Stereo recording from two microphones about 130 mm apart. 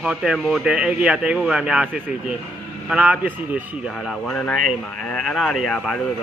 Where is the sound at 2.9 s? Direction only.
10° right (ahead or behind).